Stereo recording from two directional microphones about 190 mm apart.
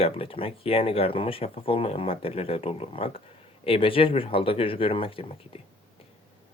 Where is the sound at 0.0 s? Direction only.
30° left (ahead or behind).